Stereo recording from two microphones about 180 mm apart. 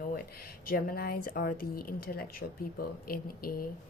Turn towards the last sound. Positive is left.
turn(degrees=55)  # may be behind; listen again after turning